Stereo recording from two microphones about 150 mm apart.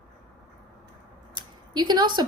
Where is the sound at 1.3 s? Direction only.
30° right (ahead or behind).